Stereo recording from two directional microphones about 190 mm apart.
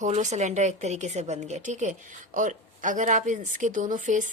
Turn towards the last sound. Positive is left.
turn(degrees=-40)  # may be behind; listen again after turning